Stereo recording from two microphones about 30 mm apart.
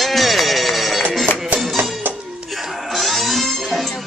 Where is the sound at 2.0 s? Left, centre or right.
Right.